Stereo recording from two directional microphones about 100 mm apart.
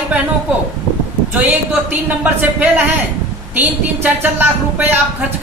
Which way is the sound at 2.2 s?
15° right (ahead or behind).